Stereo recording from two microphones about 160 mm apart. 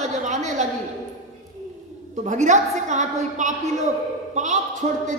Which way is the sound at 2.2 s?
50° right (ahead or behind).